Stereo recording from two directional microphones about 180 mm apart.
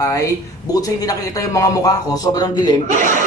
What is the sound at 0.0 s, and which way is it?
A man's voice, 20° left (ahead or behind).